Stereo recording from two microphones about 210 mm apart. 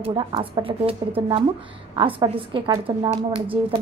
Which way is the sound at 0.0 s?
25° right (ahead or behind).